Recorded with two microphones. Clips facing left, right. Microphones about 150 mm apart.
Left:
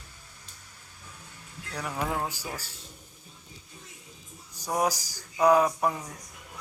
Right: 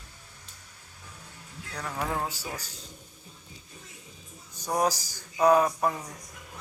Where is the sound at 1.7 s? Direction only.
5° left (ahead or behind).